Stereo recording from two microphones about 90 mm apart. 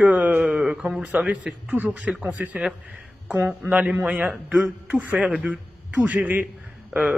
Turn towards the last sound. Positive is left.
turn(degrees=-15)  # may be behind; listen again after turning